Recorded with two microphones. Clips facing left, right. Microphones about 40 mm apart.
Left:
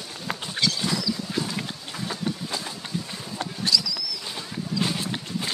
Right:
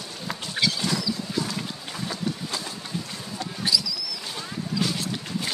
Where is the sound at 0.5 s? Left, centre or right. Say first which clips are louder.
Right 1 dB; centre.